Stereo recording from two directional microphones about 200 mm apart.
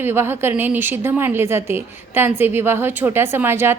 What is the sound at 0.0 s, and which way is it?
A woman's voice, 10° right (ahead or behind).